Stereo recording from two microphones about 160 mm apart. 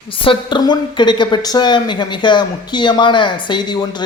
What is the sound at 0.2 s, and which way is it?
Speech, 30° left (ahead or behind).